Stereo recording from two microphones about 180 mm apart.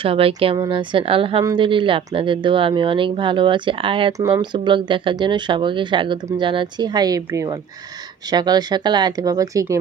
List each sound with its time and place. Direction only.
0.0 s speech: 30° right (ahead or behind)